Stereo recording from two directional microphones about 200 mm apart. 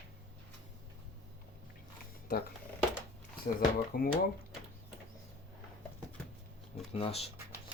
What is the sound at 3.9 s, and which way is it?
Speech, 45° left (ahead or behind).